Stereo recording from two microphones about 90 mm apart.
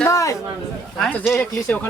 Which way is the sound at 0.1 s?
35° left (ahead or behind).